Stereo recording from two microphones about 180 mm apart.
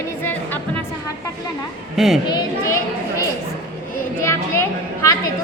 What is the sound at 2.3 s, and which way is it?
Speech, 15° left (ahead or behind).